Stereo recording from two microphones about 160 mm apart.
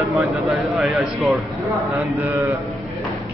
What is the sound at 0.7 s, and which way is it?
Speech, centre (ahead or behind).